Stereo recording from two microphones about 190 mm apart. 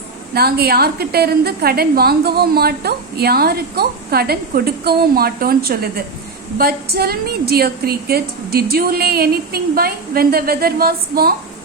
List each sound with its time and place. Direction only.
0.3 s a woman's voice: 55° right (ahead or behind)